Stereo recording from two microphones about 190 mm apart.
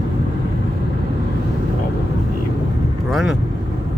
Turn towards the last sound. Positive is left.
turn(degrees=0)  # may be behind; listen again after turning